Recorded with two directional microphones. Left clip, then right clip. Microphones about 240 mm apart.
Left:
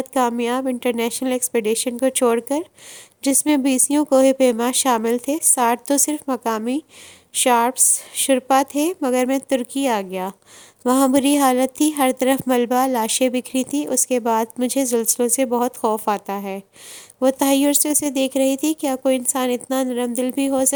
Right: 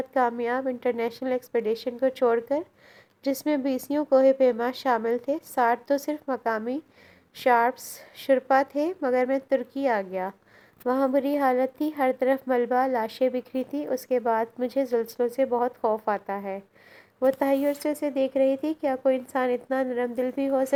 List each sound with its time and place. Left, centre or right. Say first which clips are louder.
0.1 s a woman's voice: left 5 dB; left